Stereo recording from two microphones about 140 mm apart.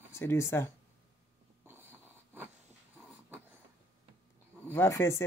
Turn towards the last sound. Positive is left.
turn(degrees=20)  # may be behind; listen again after turning